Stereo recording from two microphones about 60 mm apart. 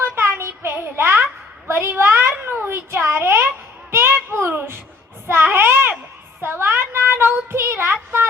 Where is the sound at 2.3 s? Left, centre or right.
Right.